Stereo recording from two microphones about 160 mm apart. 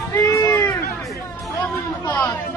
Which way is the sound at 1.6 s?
10° left (ahead or behind).